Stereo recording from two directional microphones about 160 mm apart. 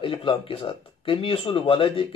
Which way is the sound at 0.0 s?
35° left (ahead or behind).